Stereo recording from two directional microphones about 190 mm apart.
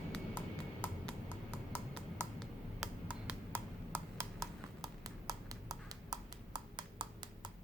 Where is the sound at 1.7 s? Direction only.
5° left (ahead or behind).